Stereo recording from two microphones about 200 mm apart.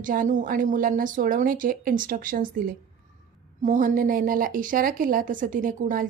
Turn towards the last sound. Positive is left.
turn(degrees=-40)  # may be behind; listen again after turning